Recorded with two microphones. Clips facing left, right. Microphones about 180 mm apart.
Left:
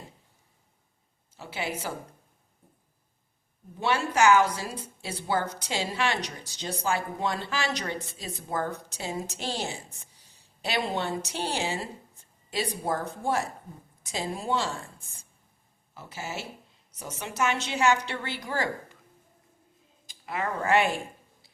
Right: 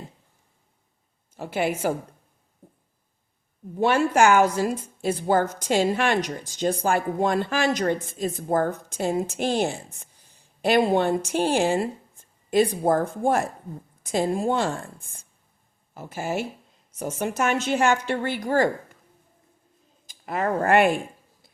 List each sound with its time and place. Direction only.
1.4 s a woman's voice: 50° right (ahead or behind)
3.8 s a woman's voice: 50° right (ahead or behind)
20.1 s speech: 50° right (ahead or behind)